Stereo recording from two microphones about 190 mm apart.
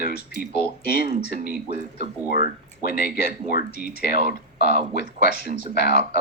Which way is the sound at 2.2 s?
55° left (ahead or behind).